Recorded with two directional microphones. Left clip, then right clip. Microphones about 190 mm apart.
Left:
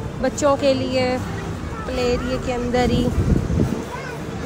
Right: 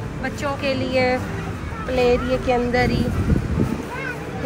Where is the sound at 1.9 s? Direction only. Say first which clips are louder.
Right 4 dB; 5° left (ahead or behind).